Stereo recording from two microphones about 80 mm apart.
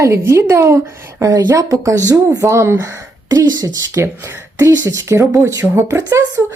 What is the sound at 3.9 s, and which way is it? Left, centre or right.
Speech, right.